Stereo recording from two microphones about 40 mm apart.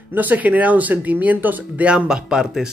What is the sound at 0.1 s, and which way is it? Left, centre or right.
Speech, right.